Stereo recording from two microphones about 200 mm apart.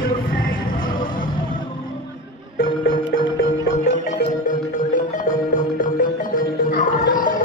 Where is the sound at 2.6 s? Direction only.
45° left (ahead or behind).